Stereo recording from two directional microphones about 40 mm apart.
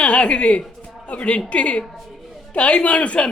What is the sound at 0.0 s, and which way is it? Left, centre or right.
A woman's voice, left.